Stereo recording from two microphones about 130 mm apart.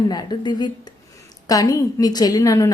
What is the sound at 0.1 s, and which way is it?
A woman's voice, 30° left (ahead or behind).